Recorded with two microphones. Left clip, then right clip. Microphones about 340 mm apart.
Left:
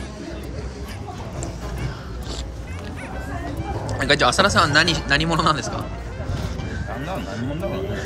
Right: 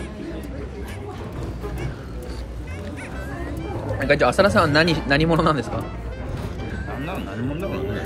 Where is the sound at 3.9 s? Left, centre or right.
Centre.